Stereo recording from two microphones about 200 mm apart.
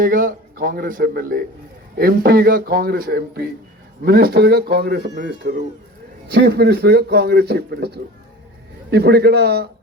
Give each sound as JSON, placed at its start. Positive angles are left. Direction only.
{"t": 0.0, "sound": "a man's voice", "side_deg": -45}